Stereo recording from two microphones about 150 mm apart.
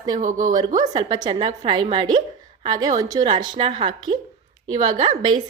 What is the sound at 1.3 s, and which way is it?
A woman's voice, 45° right (ahead or behind).